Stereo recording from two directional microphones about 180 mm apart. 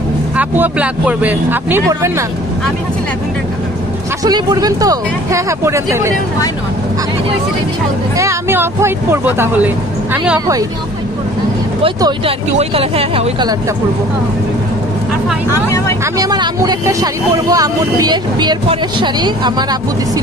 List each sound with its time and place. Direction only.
0.4 s speech: 10° right (ahead or behind)
4.2 s speech: 20° right (ahead or behind)
8.2 s speech: 15° right (ahead or behind)
11.8 s speech: 30° right (ahead or behind)
16.2 s speech: 20° right (ahead or behind)